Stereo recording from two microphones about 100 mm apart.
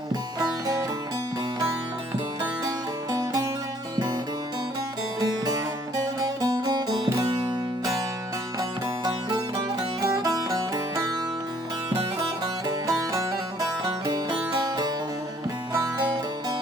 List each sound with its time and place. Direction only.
0.1 s music: 35° right (ahead or behind)
2.4 s music: 35° right (ahead or behind)
5.2 s music: 40° right (ahead or behind)
10.0 s music: 40° right (ahead or behind)
12.6 s music: 35° right (ahead or behind)